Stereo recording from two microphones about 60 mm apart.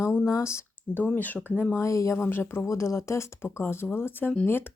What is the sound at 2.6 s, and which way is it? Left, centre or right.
Speech, left.